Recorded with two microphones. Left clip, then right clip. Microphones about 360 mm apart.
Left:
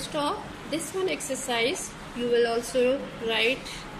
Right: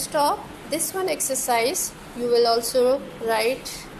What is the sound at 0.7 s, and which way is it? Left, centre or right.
A woman's voice, right.